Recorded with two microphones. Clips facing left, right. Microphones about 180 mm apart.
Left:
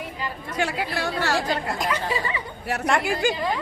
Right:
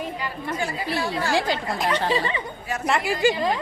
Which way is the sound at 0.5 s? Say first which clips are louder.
Left 1 dB; 70° left (ahead or behind).